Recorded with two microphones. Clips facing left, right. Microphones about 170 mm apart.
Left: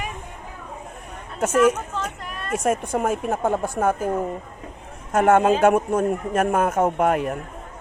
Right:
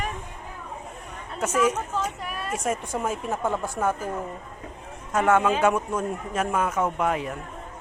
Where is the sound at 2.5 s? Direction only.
55° left (ahead or behind).